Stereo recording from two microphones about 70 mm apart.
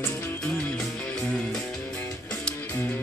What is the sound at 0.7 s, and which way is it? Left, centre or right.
Music, centre.